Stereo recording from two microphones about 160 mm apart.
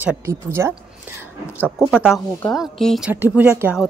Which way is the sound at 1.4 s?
15° left (ahead or behind).